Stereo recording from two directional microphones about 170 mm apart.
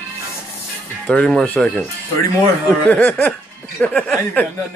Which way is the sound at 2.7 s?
10° left (ahead or behind).